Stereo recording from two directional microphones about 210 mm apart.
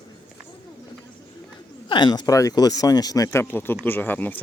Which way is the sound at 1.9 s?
20° left (ahead or behind).